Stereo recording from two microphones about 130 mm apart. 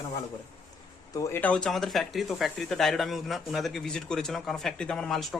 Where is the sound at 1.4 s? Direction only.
10° left (ahead or behind).